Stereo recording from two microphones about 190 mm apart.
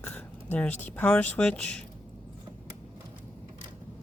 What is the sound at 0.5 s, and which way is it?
Speech, 10° left (ahead or behind).